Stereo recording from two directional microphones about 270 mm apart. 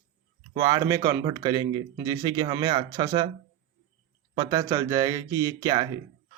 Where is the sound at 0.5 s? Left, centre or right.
Centre.